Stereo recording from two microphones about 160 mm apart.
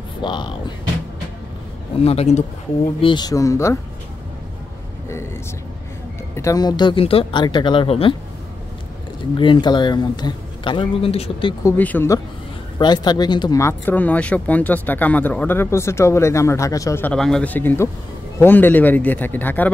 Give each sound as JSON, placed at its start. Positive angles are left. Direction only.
{"t": 0.2, "sound": "speech", "side_deg": 30}
{"t": 2.0, "sound": "speech", "side_deg": 40}
{"t": 3.0, "sound": "speech", "side_deg": 30}
{"t": 6.3, "sound": "speech", "side_deg": 20}
{"t": 9.4, "sound": "speech", "side_deg": 30}
{"t": 11.6, "sound": "speech", "side_deg": 10}
{"t": 12.7, "sound": "speech", "side_deg": 25}